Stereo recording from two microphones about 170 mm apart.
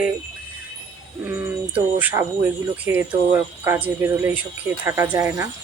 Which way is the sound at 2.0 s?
10° right (ahead or behind).